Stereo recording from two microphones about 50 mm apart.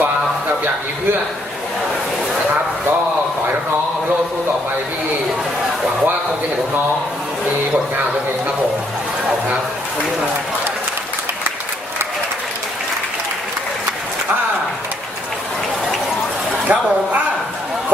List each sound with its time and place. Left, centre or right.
16.6 s speech: right